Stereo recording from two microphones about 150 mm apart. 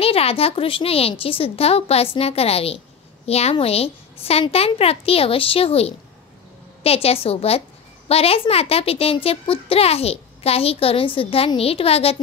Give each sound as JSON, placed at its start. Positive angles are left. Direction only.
{"t": 0.0, "sound": "a child's voice", "side_deg": 40}